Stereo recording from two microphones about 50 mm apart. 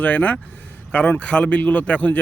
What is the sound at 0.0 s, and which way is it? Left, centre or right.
A man's voice, left.